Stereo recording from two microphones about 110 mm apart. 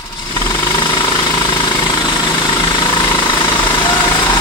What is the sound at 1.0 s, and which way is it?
Jackhammer, 50° left (ahead or behind).